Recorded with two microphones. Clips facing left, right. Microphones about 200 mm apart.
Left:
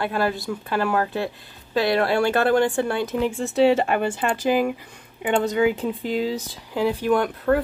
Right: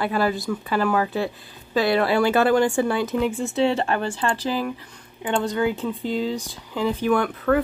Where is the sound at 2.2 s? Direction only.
55° left (ahead or behind).